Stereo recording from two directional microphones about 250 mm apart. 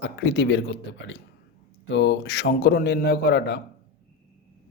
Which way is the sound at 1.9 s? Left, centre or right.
Left.